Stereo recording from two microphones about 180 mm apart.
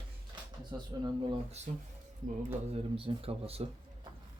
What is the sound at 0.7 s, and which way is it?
Speech, 25° right (ahead or behind).